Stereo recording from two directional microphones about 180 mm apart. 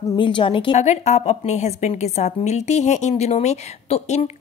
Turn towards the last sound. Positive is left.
turn(degrees=35)  # may be behind; listen again after turning